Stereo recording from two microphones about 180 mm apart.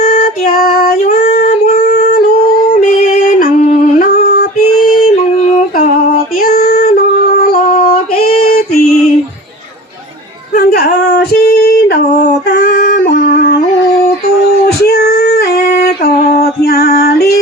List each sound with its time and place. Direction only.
0.0 s child singing: 50° left (ahead or behind)
3.4 s music: 45° left (ahead or behind)
6.4 s female singing: 55° left (ahead or behind)
10.5 s female singing: 60° left (ahead or behind)
14.8 s female singing: 60° left (ahead or behind)
16.4 s music: 60° left (ahead or behind)